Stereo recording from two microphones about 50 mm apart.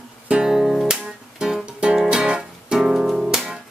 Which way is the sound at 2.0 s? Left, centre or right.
Centre.